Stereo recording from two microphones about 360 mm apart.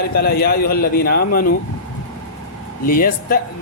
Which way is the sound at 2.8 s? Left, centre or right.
Left.